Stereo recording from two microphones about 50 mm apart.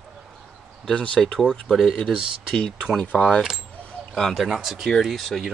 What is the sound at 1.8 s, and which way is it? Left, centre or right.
Speech, centre.